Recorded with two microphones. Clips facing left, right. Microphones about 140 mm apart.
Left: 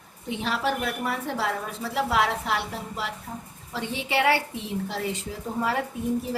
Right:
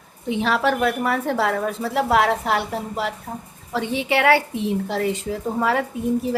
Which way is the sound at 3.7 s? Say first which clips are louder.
Right 5 dB; 65° right (ahead or behind).